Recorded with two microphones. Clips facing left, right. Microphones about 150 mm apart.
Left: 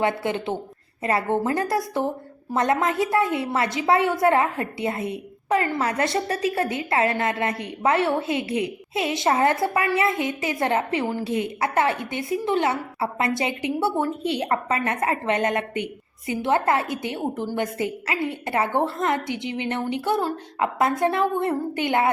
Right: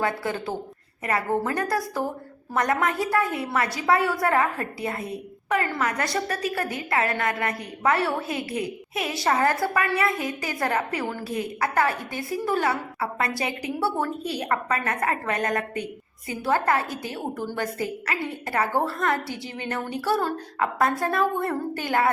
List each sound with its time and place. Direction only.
0.0 s a woman's voice: 25° left (ahead or behind)